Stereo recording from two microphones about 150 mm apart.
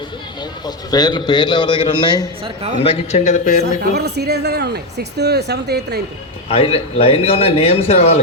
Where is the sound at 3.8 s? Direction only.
90° right.